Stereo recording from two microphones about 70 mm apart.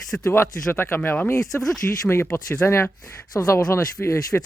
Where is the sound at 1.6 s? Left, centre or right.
Centre.